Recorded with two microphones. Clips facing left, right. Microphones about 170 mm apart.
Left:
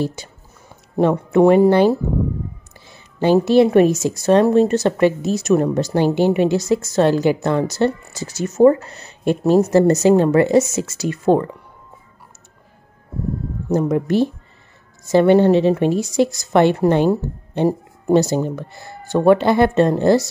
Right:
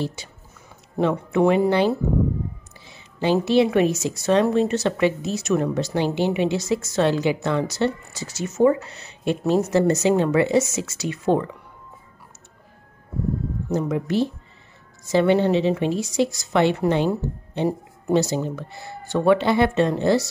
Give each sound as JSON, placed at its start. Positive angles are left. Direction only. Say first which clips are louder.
{"t": 0.0, "sound": "a woman's voice", "louder": "left 5 dB", "side_deg": 45}
{"t": 2.9, "sound": "a sound", "louder": "left 5 dB", "side_deg": 50}
{"t": 3.3, "sound": "a woman's voice", "louder": "left 6 dB", "side_deg": 40}
{"t": 13.7, "sound": "a woman's voice", "louder": "left 6 dB", "side_deg": 50}